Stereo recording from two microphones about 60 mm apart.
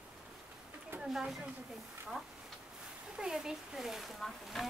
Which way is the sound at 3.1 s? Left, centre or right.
Centre.